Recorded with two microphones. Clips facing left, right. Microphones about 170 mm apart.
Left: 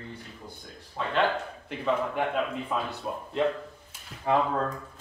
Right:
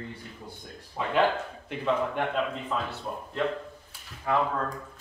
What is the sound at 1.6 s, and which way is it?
Speech, centre (ahead or behind).